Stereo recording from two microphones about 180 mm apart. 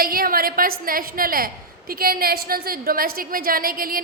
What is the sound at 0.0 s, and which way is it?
A woman's voice, 55° right (ahead or behind).